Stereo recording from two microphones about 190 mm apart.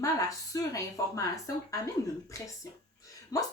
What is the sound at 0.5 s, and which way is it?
Speech, 15° left (ahead or behind).